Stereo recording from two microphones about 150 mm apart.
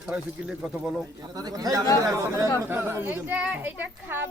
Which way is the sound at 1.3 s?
25° right (ahead or behind).